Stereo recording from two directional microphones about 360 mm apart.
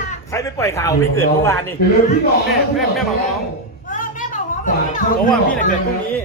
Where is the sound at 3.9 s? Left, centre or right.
Left.